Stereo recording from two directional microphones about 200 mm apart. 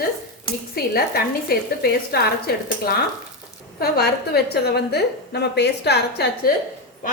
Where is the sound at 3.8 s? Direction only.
50° left (ahead or behind).